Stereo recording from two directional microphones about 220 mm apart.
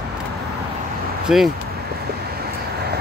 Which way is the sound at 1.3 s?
5° right (ahead or behind).